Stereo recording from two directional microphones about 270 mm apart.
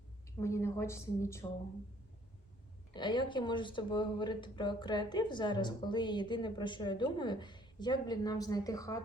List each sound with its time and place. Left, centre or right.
0.3 s a woman's voice: centre
2.9 s a woman's voice: centre